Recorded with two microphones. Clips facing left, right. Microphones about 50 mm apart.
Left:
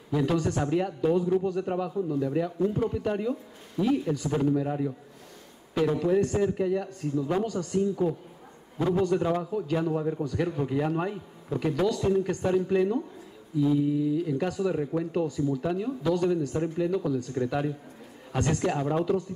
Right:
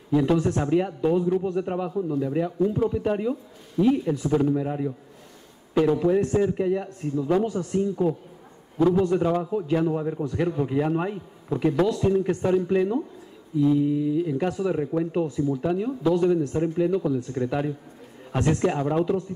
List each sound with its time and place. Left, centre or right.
0.1 s speech: centre
8.7 s a man's voice: centre
9.0 s speech: centre